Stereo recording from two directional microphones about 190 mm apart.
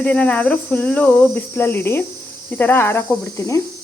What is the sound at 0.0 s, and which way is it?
Speech, 5° left (ahead or behind).